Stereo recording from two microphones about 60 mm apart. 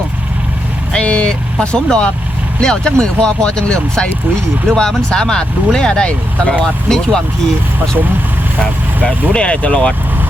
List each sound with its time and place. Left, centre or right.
0.9 s vehicle: left
1.7 s speech: centre
9.0 s speech: centre